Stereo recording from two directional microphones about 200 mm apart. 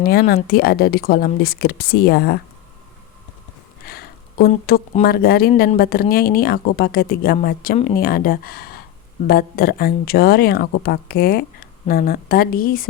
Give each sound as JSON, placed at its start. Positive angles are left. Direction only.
{"t": 0.0, "sound": "speech", "side_deg": 50}
{"t": 3.8, "sound": "a sound", "side_deg": 50}
{"t": 5.0, "sound": "speech", "side_deg": 50}